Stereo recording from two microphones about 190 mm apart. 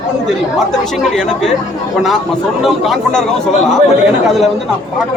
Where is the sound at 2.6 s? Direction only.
Centre (ahead or behind).